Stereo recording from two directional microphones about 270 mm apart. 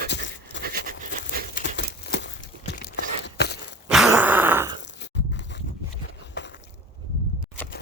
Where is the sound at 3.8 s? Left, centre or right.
Centre.